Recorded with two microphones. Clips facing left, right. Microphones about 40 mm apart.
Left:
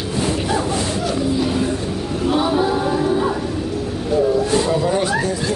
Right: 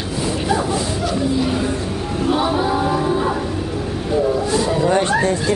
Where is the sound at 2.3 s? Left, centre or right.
Centre.